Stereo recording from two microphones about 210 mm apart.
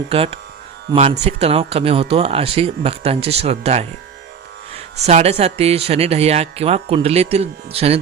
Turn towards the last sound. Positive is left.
turn(degrees=-30)  # may be behind; listen again after turning